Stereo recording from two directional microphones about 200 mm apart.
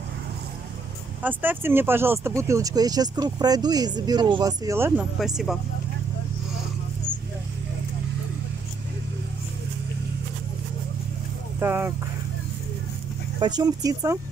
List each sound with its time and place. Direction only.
1.2 s speech: 10° right (ahead or behind)
5.2 s speech: centre (ahead or behind)
11.6 s speech: 10° right (ahead or behind)
13.4 s speech: 20° right (ahead or behind)